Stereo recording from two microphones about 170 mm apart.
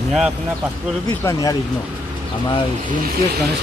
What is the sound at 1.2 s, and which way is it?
Speech, 20° left (ahead or behind).